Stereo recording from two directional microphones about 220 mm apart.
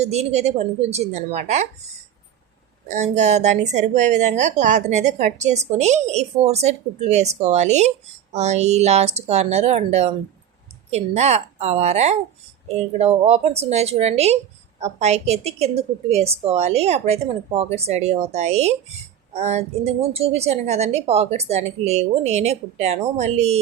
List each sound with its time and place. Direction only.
0.0 s a woman's voice: 30° right (ahead or behind)
2.9 s a woman's voice: 30° right (ahead or behind)